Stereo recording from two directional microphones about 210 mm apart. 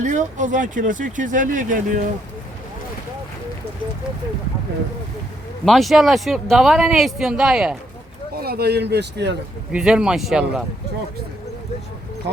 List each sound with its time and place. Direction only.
0.0 s speech: 35° right (ahead or behind)
5.6 s speech: centre (ahead or behind)
8.4 s a man's voice: 50° right (ahead or behind)
9.7 s speech: 5° right (ahead or behind)